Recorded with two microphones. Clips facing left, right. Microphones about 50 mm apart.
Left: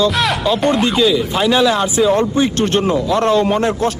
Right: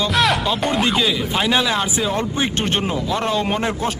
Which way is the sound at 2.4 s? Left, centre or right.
Right.